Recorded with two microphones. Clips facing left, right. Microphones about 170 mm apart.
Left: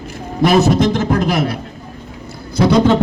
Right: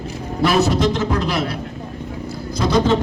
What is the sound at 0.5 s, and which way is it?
Music, 50° left (ahead or behind).